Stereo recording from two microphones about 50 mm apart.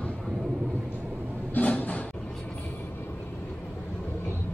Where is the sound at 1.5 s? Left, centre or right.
Left.